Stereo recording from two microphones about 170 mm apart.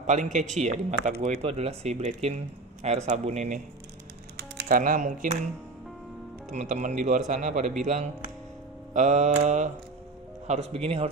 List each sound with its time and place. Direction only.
0.0 s a man's voice: 45° right (ahead or behind)
4.6 s speech: 55° right (ahead or behind)
6.5 s a man's voice: 45° right (ahead or behind)